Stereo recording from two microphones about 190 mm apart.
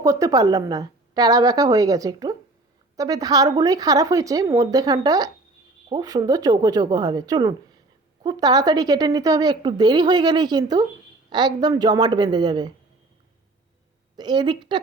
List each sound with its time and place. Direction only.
0.0 s speech: 20° right (ahead or behind)
14.2 s speech: 25° right (ahead or behind)